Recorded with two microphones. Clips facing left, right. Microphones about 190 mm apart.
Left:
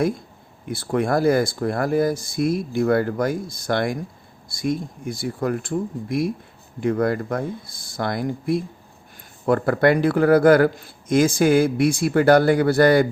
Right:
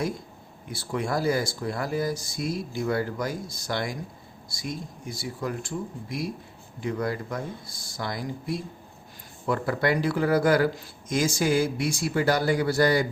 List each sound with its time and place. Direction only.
0.7 s speech: 55° left (ahead or behind)